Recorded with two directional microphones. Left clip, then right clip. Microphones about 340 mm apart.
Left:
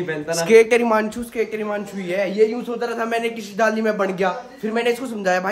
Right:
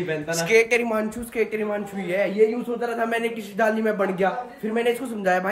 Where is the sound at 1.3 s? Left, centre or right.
Centre.